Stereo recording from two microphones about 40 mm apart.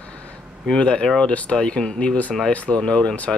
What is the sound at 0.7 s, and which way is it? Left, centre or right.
Speech, left.